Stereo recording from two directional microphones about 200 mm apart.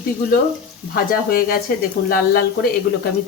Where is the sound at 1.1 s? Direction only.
45° left (ahead or behind).